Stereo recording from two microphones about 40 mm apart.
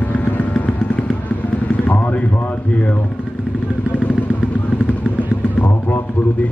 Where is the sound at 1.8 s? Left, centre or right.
Left.